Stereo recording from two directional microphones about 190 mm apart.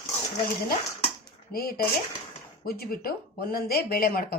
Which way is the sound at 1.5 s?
55° left (ahead or behind).